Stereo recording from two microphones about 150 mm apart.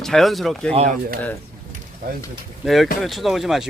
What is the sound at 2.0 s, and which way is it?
Speech, 80° right.